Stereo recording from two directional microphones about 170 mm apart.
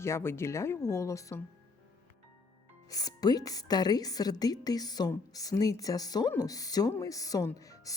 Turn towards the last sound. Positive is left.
turn(degrees=20)  # may be behind; listen again after turning